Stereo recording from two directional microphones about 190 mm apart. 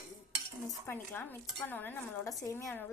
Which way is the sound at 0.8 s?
10° left (ahead or behind).